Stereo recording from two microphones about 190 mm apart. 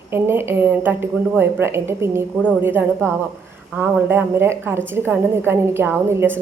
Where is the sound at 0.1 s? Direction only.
10° right (ahead or behind).